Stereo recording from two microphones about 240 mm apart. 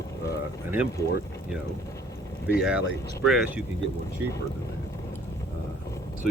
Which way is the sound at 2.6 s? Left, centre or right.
Centre.